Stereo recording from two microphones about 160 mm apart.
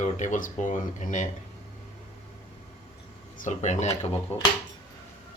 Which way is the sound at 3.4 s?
50° left (ahead or behind).